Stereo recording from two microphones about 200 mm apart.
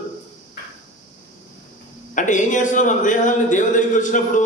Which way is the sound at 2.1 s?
40° left (ahead or behind).